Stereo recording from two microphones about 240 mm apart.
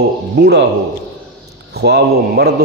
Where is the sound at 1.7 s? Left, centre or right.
Right.